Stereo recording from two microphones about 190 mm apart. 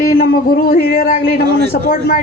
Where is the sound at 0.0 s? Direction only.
50° left (ahead or behind).